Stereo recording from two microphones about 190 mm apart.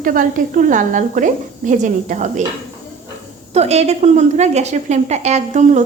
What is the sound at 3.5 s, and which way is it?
A woman's voice, 35° right (ahead or behind).